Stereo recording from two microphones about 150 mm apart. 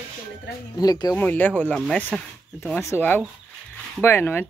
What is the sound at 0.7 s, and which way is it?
Speech, 25° left (ahead or behind).